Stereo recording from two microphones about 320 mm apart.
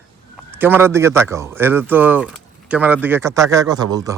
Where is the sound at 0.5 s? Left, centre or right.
Centre.